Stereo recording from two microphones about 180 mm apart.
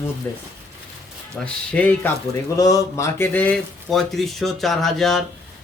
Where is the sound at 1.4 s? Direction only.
5° left (ahead or behind).